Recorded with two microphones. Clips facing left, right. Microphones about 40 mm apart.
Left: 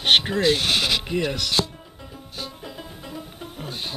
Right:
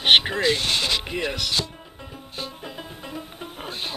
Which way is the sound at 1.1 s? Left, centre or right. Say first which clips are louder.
Left 2 dB; centre.